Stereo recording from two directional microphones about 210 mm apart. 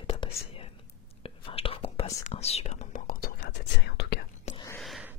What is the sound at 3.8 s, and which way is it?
Whispering, 55° left (ahead or behind).